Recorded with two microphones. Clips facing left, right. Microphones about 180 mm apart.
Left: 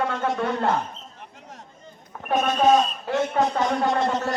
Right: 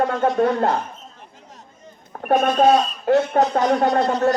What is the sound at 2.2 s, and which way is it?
Speech, 50° right (ahead or behind).